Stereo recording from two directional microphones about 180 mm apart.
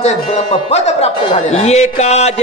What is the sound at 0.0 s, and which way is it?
Speech, 35° left (ahead or behind).